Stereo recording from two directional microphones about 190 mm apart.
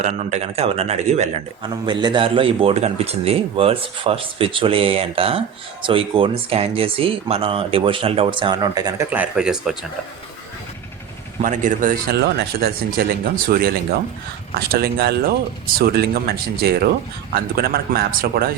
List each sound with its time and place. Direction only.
0.0 s speech: 40° right (ahead or behind)
1.6 s a man's voice: 25° right (ahead or behind)
9.0 s speech: 10° right (ahead or behind)
11.3 s speech: 40° right (ahead or behind)
12.1 s speech: 55° right (ahead or behind)